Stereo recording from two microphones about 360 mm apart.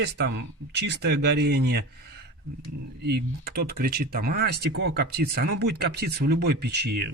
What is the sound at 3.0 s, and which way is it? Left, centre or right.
Speech, right.